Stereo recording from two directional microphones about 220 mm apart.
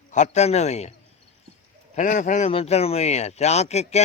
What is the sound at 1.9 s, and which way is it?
Speech, 35° left (ahead or behind).